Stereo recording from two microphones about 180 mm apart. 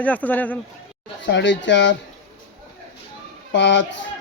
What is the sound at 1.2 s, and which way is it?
Speech, 80° left.